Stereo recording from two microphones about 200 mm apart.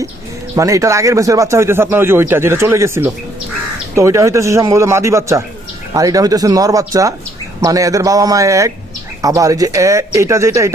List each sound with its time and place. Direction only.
0.5 s speech: 15° right (ahead or behind)